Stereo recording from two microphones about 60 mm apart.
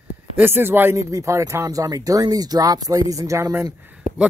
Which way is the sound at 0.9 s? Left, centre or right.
Right.